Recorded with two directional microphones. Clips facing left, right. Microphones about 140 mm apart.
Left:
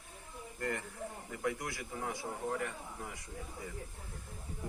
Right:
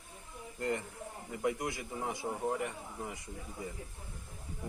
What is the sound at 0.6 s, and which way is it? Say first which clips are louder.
A man's voice: right 3 dB; 20° right (ahead or behind).